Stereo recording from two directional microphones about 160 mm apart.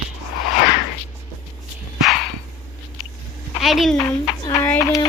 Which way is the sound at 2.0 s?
Centre (ahead or behind).